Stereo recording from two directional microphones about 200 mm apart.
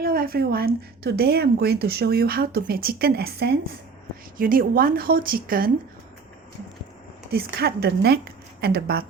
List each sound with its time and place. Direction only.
0.0 s speech: 50° right (ahead or behind)
7.3 s speech: 50° right (ahead or behind)